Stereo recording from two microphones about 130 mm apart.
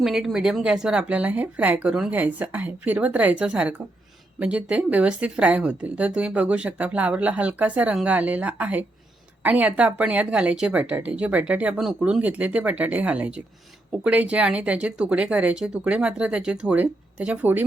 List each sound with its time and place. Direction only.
0.0 s a woman's voice: centre (ahead or behind)